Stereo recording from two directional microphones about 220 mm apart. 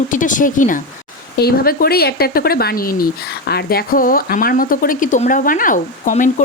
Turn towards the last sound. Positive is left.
turn(degrees=35)  # may be behind; listen again after turning